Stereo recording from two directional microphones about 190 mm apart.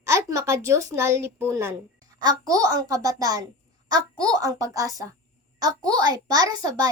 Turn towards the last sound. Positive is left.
turn(degrees=-20)  # may be behind; listen again after turning